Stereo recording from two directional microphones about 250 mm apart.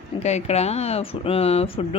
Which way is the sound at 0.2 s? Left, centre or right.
Left.